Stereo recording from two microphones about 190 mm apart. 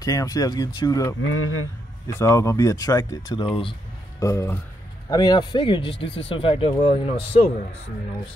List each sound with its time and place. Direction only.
0.0 s speech: 15° left (ahead or behind)
1.2 s speech: 90° left
2.0 s speech: 15° left (ahead or behind)
4.2 s speech: 15° left (ahead or behind); by 7.5 s 30° left (ahead or behind)